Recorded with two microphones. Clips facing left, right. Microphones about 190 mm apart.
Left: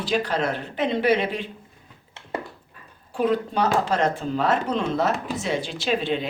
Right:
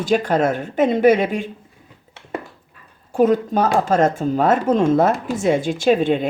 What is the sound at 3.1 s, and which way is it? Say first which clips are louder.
A woman's voice: right 6 dB; 45° right (ahead or behind).